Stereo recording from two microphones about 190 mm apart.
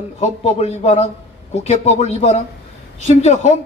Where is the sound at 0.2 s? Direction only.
35° left (ahead or behind).